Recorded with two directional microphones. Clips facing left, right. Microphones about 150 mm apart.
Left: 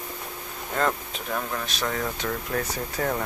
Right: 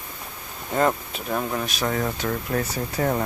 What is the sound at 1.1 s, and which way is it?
Speech, 15° right (ahead or behind).